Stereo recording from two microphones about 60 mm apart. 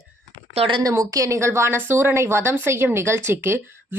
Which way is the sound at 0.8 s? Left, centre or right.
Right.